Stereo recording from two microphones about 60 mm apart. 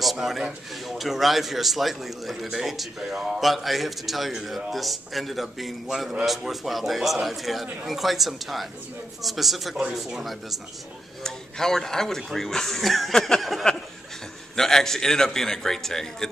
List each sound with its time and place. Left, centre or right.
0.0 s a man's voice: centre
11.2 s a man's voice: centre